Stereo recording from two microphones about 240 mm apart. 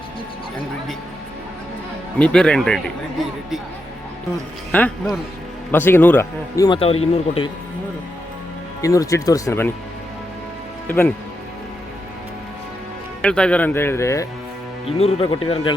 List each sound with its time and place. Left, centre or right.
2.1 s speech: centre
4.7 s speech: centre
6.7 s speech: left
8.8 s speech: centre
10.8 s speech: centre
13.2 s speech: centre
14.8 s speech: left